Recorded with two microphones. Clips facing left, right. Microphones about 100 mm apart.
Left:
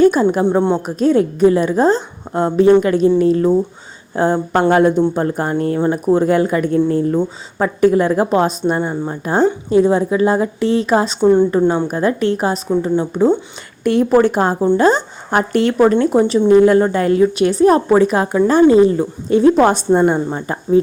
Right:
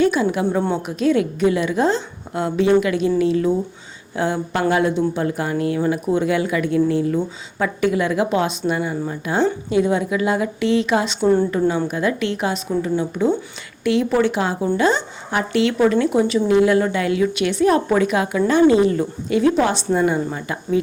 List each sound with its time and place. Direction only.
0.0 s a woman's voice: 45° left (ahead or behind)
19.6 s speech: 45° left (ahead or behind)
20.1 s a woman's voice: 30° left (ahead or behind)